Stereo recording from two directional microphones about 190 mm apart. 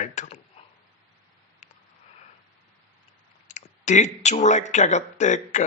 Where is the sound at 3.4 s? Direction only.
40° left (ahead or behind).